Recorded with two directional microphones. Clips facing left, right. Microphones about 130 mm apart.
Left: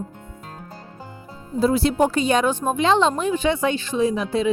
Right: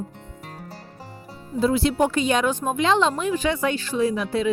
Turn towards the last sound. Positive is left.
turn(degrees=25)  # may be behind; listen again after turning